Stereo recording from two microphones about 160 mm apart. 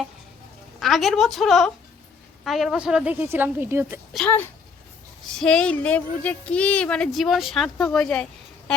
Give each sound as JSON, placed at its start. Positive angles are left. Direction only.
{"t": 0.8, "sound": "a woman's voice", "side_deg": 0}
{"t": 5.3, "sound": "speech", "side_deg": 5}